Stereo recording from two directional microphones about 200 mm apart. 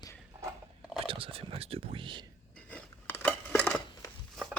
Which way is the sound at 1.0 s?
25° right (ahead or behind).